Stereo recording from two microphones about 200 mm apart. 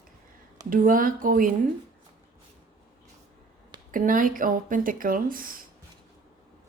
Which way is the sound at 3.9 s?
45° right (ahead or behind).